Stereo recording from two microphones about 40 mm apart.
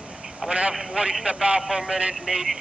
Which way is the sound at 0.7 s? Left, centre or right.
Centre.